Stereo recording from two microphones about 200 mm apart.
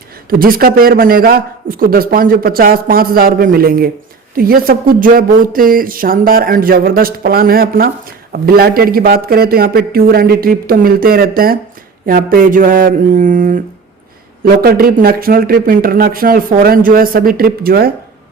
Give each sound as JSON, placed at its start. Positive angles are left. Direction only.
{"t": 0.3, "sound": "speech", "side_deg": -45}